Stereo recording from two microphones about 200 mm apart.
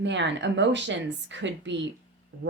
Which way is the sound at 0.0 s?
65° right (ahead or behind).